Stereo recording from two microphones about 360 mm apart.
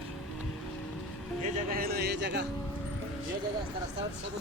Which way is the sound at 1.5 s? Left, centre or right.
Right.